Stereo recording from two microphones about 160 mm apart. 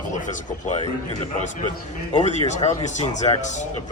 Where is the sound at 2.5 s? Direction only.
45° left (ahead or behind).